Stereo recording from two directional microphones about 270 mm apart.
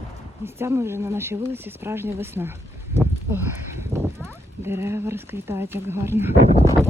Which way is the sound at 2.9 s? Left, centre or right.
Centre.